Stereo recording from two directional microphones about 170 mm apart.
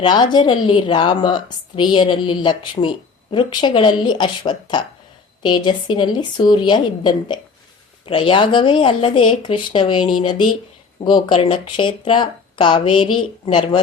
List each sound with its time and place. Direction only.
0.0 s a woman's voice: 25° left (ahead or behind)